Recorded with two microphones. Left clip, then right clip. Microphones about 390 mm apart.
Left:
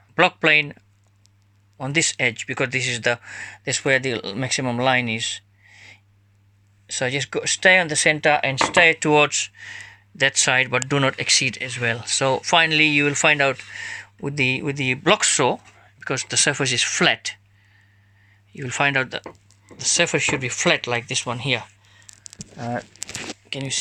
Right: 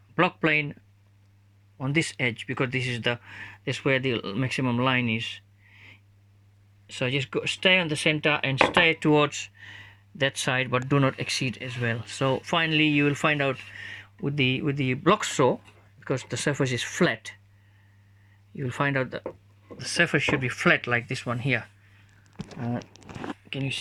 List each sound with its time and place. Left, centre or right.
0.2 s speech: centre
1.8 s speech: centre
18.5 s speech: centre
22.0 s a sound: left
23.5 s speech: centre